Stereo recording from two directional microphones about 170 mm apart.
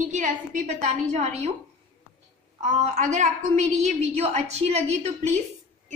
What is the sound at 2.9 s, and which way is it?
A woman's voice, 45° right (ahead or behind).